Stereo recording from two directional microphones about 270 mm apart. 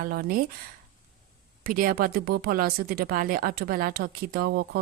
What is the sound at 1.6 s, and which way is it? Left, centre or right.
Speech, right.